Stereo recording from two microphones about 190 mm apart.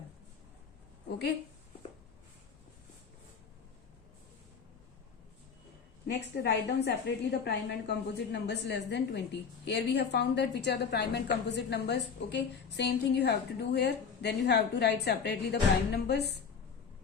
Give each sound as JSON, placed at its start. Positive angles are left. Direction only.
{"t": 6.1, "sound": "a woman's voice", "side_deg": 65}